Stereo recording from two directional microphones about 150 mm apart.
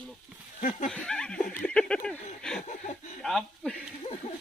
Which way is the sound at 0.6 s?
60° left (ahead or behind).